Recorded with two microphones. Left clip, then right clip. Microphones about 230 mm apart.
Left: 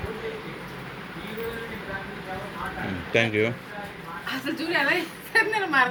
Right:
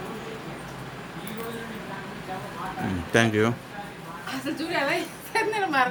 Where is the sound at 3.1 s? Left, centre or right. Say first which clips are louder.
Right 1 dB; right.